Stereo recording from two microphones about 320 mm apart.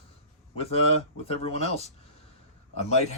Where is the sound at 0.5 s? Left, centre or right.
Centre.